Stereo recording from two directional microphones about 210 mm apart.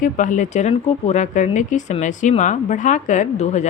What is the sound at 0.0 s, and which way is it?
Speech, 35° left (ahead or behind).